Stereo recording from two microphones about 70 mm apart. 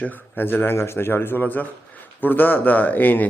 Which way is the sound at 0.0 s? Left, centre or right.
Left.